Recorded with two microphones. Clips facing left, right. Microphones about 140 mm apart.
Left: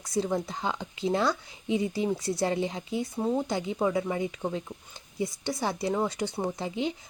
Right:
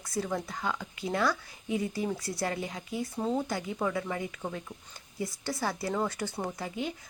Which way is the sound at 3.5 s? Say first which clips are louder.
Left 4 dB; 20° left (ahead or behind).